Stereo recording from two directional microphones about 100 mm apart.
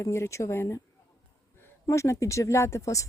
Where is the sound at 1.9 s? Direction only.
30° left (ahead or behind).